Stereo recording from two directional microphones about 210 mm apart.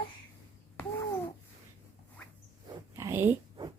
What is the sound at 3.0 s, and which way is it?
Dog, 10° right (ahead or behind).